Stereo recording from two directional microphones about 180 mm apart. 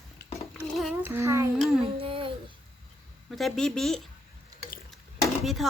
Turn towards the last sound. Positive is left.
turn(degrees=0)  # may be behind; listen again after turning